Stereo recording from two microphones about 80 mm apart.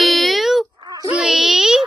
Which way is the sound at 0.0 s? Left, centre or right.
Centre.